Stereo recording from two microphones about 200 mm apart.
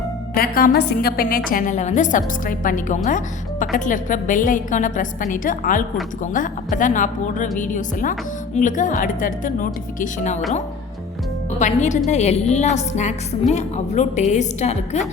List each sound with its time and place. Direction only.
0.3 s a woman's voice: 45° left (ahead or behind)
11.6 s a woman's voice: 35° left (ahead or behind)